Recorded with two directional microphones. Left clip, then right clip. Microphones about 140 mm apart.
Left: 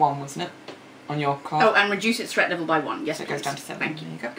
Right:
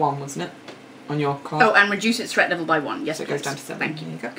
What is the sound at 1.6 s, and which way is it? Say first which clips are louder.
A woman's voice: right 3 dB; 15° right (ahead or behind).